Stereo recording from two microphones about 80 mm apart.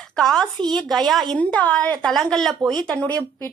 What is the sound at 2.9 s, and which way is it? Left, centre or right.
Speech, centre.